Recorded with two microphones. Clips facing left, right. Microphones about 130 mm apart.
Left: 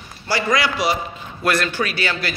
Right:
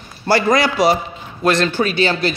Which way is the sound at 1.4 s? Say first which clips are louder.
Right 5 dB; 25° right (ahead or behind).